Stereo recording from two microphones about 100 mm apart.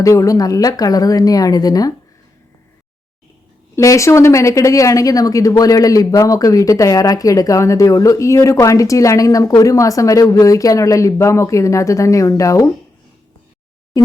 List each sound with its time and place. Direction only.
0.0 s speech: 30° left (ahead or behind)
3.8 s speech: 30° left (ahead or behind)
14.0 s a sound: 35° left (ahead or behind)